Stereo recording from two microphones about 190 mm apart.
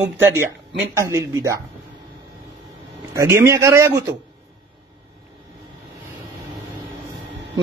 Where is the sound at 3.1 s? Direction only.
15° right (ahead or behind).